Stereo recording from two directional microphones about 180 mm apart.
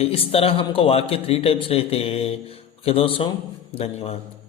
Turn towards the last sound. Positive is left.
turn(degrees=35)  # may be behind; listen again after turning